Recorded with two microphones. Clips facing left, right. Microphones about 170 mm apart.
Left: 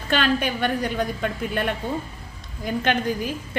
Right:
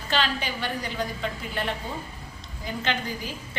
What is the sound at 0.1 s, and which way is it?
A woman's voice, 55° left (ahead or behind).